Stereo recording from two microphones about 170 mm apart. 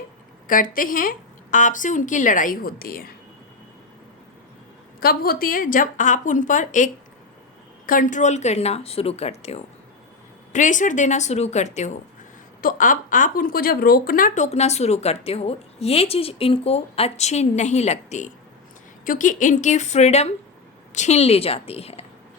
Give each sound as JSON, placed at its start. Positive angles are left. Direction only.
{"t": 0.4, "sound": "a woman's voice", "side_deg": 55}
{"t": 4.9, "sound": "a woman's voice", "side_deg": 60}
{"t": 19.0, "sound": "a woman's voice", "side_deg": 50}